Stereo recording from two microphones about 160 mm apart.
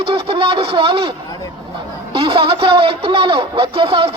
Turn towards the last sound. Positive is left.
turn(degrees=-30)  # may be behind; listen again after turning